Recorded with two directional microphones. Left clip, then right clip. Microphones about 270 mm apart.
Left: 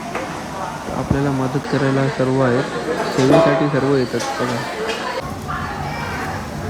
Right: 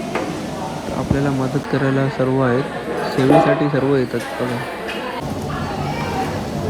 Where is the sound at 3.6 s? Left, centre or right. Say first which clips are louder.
Even; centre.